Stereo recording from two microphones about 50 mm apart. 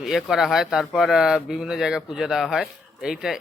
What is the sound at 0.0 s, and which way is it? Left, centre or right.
A man's voice, centre.